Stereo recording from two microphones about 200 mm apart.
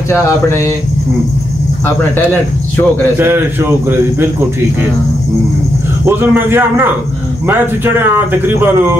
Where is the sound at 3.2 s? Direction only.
10° right (ahead or behind).